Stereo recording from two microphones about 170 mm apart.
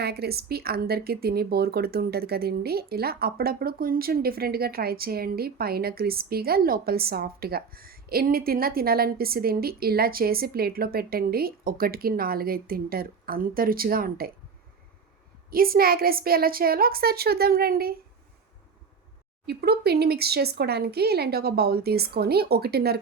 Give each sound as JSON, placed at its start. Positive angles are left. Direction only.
{"t": 0.0, "sound": "speech", "side_deg": -70}
{"t": 15.4, "sound": "speech", "side_deg": -60}
{"t": 19.5, "sound": "speech", "side_deg": -70}